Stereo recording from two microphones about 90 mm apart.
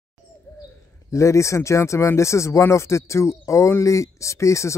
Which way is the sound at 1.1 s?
35° left (ahead or behind).